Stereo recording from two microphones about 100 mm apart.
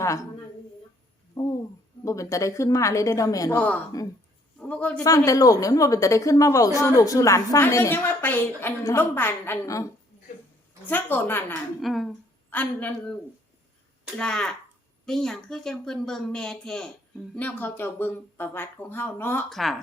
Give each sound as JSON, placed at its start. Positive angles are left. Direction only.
{"t": 1.4, "sound": "a sound", "side_deg": 40}
{"t": 2.0, "sound": "a woman's voice", "side_deg": 30}
{"t": 3.6, "sound": "a man's voice", "side_deg": 15}
{"t": 5.0, "sound": "a woman's voice", "side_deg": 35}
{"t": 10.8, "sound": "speech", "side_deg": 20}
{"t": 11.8, "sound": "a woman's voice", "side_deg": 0}
{"t": 12.5, "sound": "speech", "side_deg": 15}
{"t": 14.2, "sound": "a woman's voice", "side_deg": 10}
{"t": 19.5, "sound": "a woman's voice", "side_deg": 0}